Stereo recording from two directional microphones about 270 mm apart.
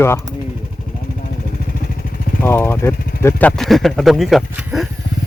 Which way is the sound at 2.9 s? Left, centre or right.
Left.